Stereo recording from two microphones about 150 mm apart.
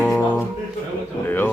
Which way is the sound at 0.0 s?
10° left (ahead or behind).